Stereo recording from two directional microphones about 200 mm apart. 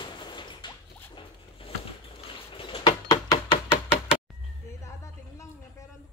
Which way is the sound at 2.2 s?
25° left (ahead or behind).